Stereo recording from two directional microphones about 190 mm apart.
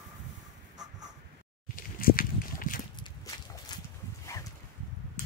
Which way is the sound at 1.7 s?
50° left (ahead or behind).